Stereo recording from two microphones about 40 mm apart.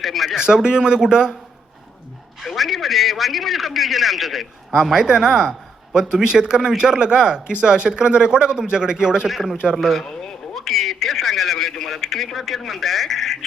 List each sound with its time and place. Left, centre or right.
0.0 s speech: centre
0.3 s a man's voice: centre
2.4 s a man's voice: centre
4.8 s a man's voice: centre
9.3 s a man's voice: centre
10.1 s speech: centre